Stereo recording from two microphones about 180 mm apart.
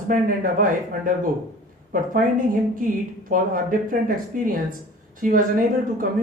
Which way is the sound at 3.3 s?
50° right (ahead or behind).